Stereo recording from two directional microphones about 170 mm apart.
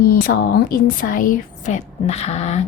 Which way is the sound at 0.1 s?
60° left (ahead or behind).